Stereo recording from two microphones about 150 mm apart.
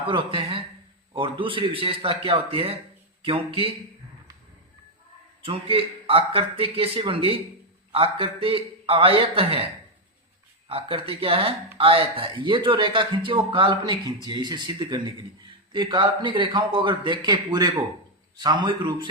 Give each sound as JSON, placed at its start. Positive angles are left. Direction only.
{"t": 0.1, "sound": "a man's voice", "side_deg": -35}
{"t": 5.4, "sound": "a man's voice", "side_deg": -35}
{"t": 10.7, "sound": "a man's voice", "side_deg": -35}